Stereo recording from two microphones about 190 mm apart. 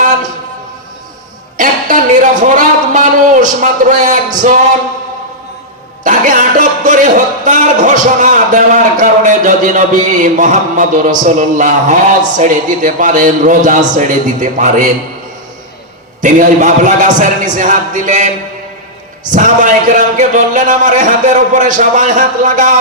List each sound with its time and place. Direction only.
1.5 s a sound: 45° right (ahead or behind)
2.4 s a man's voice: 40° right (ahead or behind)
6.1 s a man's voice: 45° right (ahead or behind)
16.2 s a man's voice: 40° right (ahead or behind)
19.3 s a man's voice: 45° right (ahead or behind)